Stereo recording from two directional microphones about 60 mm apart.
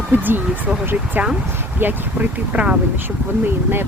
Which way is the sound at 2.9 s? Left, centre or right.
Right.